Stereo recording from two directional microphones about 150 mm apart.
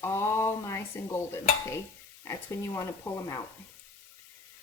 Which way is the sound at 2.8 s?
20° left (ahead or behind).